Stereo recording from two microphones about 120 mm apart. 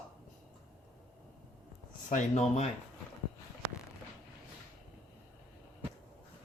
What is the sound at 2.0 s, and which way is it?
Speech, 80° left.